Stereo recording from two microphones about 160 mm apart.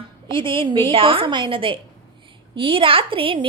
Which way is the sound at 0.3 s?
30° right (ahead or behind).